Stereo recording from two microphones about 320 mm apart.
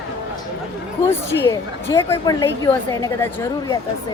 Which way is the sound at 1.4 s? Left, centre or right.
Centre.